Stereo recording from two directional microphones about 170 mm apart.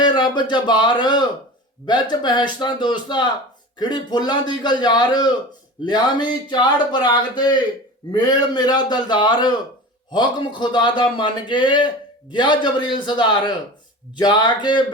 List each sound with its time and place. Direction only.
0.0 s speech: 25° left (ahead or behind)